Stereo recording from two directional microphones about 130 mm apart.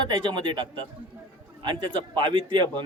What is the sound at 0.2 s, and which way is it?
Speech, 35° right (ahead or behind).